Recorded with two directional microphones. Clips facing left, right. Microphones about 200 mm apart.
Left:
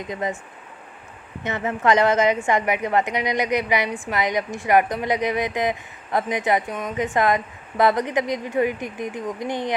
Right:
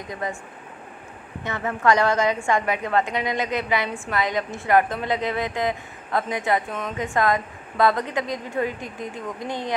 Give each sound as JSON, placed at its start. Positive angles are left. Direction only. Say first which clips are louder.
{"t": 0.1, "sound": "a woman's voice", "louder": "left 3 dB", "side_deg": 20}
{"t": 1.5, "sound": "a woman's voice", "louder": "left 1 dB", "side_deg": 20}